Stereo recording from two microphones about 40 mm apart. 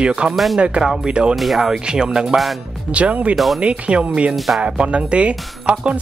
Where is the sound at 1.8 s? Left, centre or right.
Right.